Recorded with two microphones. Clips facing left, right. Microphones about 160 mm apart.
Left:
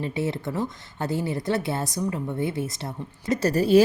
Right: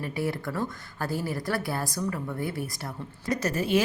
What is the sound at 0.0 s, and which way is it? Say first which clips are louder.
A woman's voice: left 3 dB; 25° left (ahead or behind).